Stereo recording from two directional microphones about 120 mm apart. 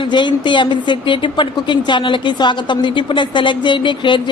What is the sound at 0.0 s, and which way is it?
A woman's voice, 40° left (ahead or behind).